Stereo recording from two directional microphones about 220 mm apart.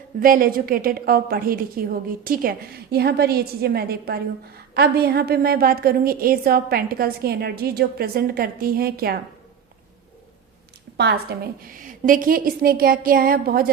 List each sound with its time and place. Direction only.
0.2 s a woman's voice: 40° right (ahead or behind)
10.9 s a woman's voice: 50° right (ahead or behind)
11.6 s a woman's voice: 40° right (ahead or behind)